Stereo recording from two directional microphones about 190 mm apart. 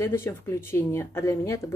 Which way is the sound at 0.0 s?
15° left (ahead or behind).